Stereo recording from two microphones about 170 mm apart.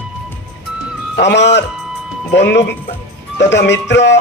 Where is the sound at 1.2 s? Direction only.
90° left.